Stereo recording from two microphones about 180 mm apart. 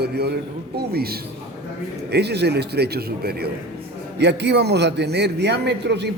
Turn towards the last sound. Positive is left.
turn(degrees=-70)  # may be behind; listen again after turning